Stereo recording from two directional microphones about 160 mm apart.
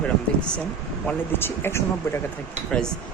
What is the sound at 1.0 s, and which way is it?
Speech, 15° left (ahead or behind).